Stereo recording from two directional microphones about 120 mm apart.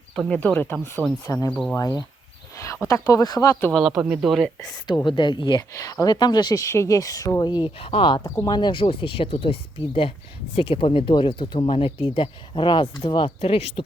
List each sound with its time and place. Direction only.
0.3 s speech: 15° left (ahead or behind); by 3.6 s 30° left (ahead or behind)
3.7 s speech: centre (ahead or behind)
5.0 s speech: 40° left (ahead or behind)
5.7 s speech: 30° left (ahead or behind); by 8.2 s 50° left (ahead or behind)
8.2 s speech: 20° left (ahead or behind)
8.4 s speech: 35° left (ahead or behind); by 13.8 s 55° left (ahead or behind)